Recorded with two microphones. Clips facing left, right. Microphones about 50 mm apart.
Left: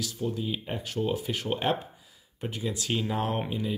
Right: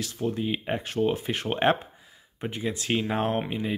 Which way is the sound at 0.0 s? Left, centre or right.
Right.